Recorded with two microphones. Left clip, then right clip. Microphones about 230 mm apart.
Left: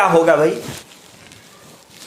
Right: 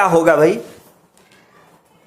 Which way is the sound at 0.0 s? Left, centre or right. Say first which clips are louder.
Right 1 dB; right.